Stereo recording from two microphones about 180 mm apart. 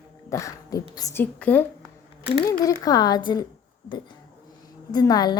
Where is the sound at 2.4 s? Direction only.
20° left (ahead or behind).